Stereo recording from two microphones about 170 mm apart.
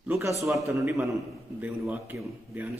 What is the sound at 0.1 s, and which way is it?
A man's voice, 15° right (ahead or behind).